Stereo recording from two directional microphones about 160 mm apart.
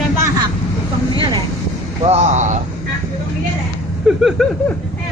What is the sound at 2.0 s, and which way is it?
Speech, 45° right (ahead or behind).